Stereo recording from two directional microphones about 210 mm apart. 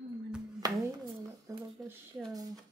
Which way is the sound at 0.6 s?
20° right (ahead or behind).